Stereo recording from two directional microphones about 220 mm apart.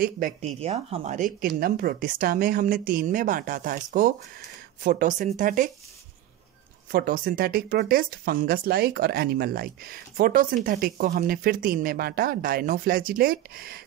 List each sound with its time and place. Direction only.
0.0 s speech: 40° right (ahead or behind)
0.6 s speech: 25° right (ahead or behind)
6.9 s speech: 40° right (ahead or behind)